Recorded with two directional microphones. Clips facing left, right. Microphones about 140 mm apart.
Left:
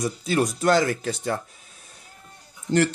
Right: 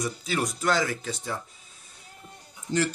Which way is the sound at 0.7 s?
55° left (ahead or behind).